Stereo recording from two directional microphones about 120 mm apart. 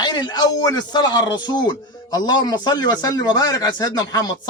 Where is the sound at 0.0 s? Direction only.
35° left (ahead or behind).